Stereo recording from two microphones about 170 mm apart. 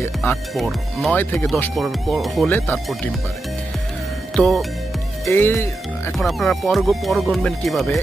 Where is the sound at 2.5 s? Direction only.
10° left (ahead or behind).